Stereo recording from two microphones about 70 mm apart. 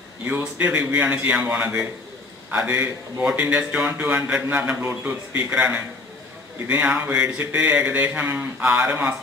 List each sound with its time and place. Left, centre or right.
0.2 s a man's voice: right